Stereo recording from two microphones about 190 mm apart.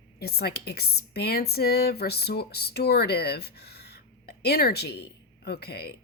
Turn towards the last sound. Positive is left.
turn(degrees=55)  # may be behind; listen again after turning